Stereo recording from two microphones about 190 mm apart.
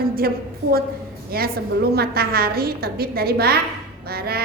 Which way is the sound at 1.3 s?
50° right (ahead or behind).